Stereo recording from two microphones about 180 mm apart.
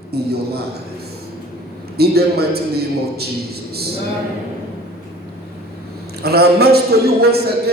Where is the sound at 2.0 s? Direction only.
60° right (ahead or behind).